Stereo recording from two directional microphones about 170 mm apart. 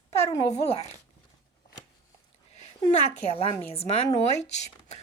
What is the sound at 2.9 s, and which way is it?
A woman's voice, 40° left (ahead or behind).